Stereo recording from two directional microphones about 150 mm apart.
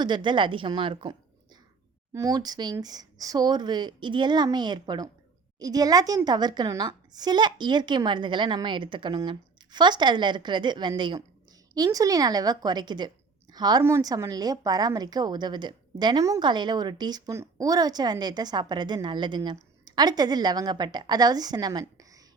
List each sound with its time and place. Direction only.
0.0 s a woman's voice: 30° right (ahead or behind)
2.1 s a woman's voice: 25° right (ahead or behind)